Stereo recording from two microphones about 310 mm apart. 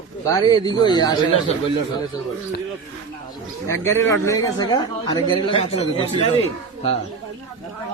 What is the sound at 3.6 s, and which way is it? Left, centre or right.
A man's voice, centre.